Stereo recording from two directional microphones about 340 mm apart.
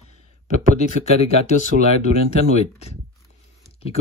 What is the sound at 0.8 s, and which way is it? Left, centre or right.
Speech, centre.